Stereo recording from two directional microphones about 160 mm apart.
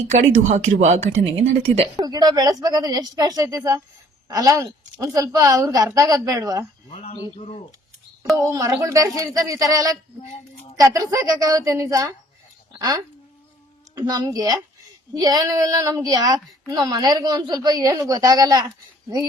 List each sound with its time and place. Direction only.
0.1 s speech: 50° right (ahead or behind)
2.0 s a woman's voice: 25° right (ahead or behind)
6.9 s speech: 40° left (ahead or behind)
8.4 s a woman's voice: 20° right (ahead or behind)
13.9 s a woman's voice: 20° right (ahead or behind)